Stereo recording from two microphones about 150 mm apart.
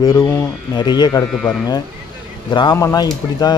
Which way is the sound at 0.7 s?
30° left (ahead or behind).